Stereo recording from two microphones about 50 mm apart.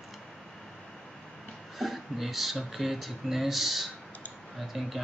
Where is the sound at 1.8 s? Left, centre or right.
Centre.